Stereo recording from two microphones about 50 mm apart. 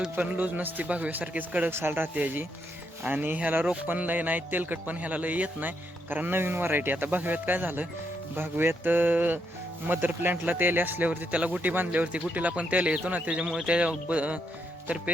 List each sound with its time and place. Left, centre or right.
0.2 s a man's voice: right
1.7 s speech: right
2.1 s a man's voice: right
11.6 s a man's voice: right
11.9 s speech: right